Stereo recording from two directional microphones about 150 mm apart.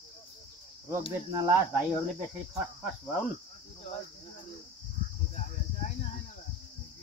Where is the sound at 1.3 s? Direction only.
20° right (ahead or behind).